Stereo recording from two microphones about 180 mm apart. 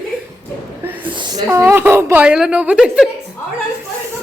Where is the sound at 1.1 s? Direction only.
25° right (ahead or behind).